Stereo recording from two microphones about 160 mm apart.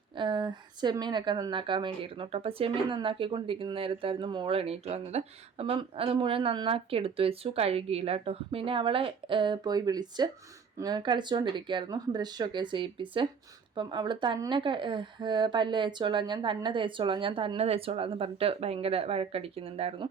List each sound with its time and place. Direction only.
0.2 s speech: 30° right (ahead or behind)